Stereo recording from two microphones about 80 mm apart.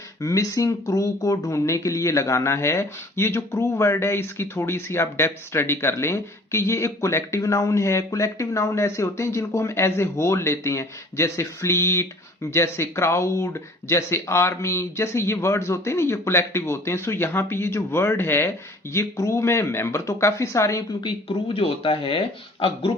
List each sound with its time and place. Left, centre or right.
0.2 s speech: left